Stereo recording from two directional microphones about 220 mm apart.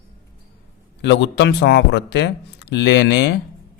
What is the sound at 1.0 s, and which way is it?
Speech, 50° left (ahead or behind).